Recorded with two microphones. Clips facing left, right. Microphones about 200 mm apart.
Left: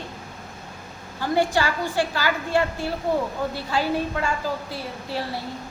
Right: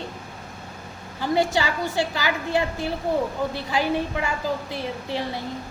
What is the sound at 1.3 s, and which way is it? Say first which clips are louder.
A woman's voice: even; 20° right (ahead or behind).